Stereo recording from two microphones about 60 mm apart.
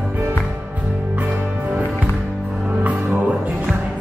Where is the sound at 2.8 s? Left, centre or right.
Right.